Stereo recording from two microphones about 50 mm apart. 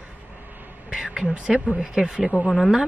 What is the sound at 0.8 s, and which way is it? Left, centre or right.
A woman's voice, centre.